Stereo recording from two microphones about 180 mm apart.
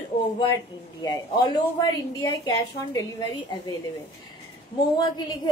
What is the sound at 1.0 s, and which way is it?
A woman's voice, 25° left (ahead or behind).